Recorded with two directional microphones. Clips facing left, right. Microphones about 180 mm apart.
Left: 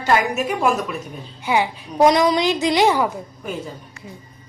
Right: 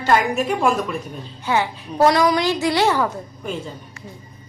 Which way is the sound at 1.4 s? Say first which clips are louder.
Left 1 dB; 15° left (ahead or behind).